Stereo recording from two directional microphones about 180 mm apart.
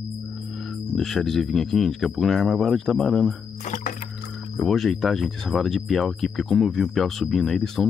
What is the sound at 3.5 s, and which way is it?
Music, 45° left (ahead or behind).